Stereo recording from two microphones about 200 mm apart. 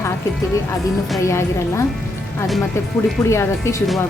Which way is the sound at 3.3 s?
15° left (ahead or behind).